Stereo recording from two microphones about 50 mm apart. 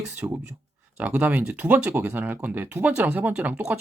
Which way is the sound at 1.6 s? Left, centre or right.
Right.